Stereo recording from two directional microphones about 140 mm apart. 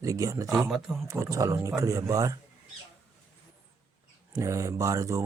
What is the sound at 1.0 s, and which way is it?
Speech, 20° right (ahead or behind).